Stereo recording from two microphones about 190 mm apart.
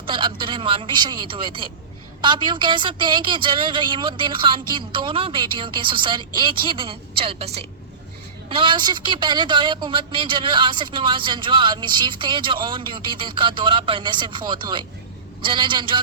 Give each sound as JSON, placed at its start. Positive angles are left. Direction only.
{"t": 0.0, "sound": "a woman's voice", "side_deg": -25}